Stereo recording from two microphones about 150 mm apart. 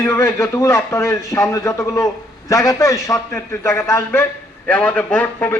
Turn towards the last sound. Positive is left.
turn(degrees=10)  # may be behind; listen again after turning